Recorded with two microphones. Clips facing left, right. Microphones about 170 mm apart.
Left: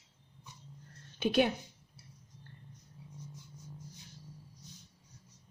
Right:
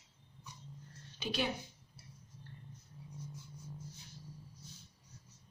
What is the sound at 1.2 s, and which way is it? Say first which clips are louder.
Speech: left 9 dB; 55° left (ahead or behind).